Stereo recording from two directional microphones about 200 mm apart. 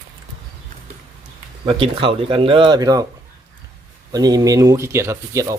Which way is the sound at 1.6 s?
25° right (ahead or behind).